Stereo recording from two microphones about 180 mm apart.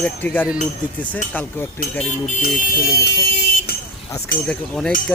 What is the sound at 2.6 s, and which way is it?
Speech, 55° left (ahead or behind).